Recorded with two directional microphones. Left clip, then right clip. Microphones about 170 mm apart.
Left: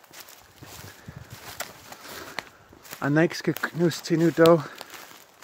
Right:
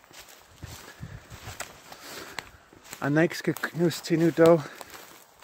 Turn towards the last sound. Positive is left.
turn(degrees=0)  # may be behind; listen again after turning